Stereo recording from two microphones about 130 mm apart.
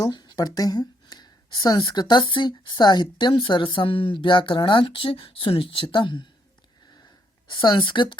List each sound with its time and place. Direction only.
0.0 s speech: 30° left (ahead or behind)
7.5 s speech: 35° left (ahead or behind)